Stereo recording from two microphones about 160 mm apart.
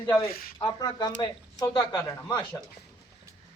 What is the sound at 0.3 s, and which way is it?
Speech, 65° left (ahead or behind).